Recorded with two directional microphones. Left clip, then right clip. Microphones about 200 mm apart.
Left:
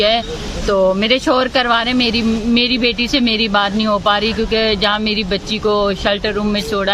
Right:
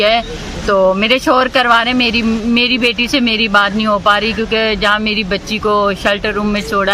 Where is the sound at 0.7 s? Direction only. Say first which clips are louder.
Right 2 dB; centre (ahead or behind).